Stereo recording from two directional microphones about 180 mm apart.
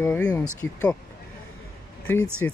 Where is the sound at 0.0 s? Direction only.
5° left (ahead or behind).